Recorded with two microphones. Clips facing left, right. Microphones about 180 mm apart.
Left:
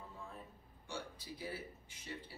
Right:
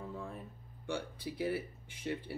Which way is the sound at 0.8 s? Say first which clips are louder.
Right 8 dB; 60° right (ahead or behind).